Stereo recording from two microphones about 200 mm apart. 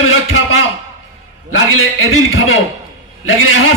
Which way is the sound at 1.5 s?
90° left.